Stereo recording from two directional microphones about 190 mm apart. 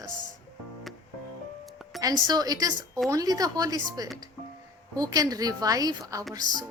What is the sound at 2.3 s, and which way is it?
A woman's voice, 20° right (ahead or behind).